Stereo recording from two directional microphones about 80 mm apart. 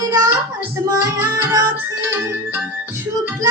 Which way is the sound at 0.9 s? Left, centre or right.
Right.